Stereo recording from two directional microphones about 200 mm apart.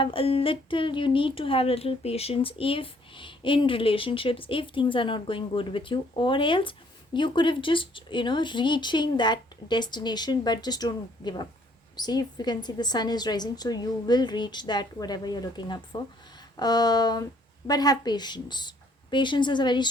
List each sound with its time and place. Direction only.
0.0 s speech: 25° left (ahead or behind)